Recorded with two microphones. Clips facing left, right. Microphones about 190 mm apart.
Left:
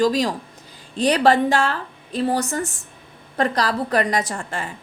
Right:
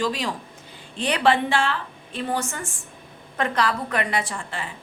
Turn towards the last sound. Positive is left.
turn(degrees=45)  # may be behind; listen again after turning